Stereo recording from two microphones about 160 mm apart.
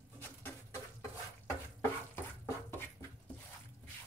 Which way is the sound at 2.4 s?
15° left (ahead or behind).